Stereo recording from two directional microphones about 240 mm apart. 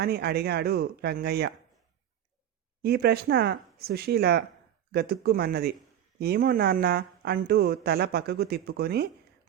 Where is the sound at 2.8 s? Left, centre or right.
Right.